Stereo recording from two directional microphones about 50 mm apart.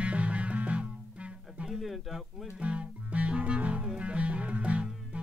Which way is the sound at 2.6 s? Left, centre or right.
Right.